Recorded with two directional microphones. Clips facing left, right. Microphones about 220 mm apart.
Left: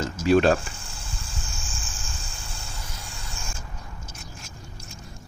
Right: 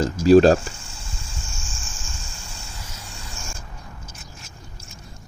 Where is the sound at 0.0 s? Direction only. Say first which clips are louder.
Right 6 dB; 35° right (ahead or behind).